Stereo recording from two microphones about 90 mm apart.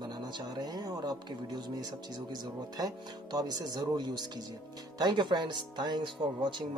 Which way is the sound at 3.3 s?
45° right (ahead or behind).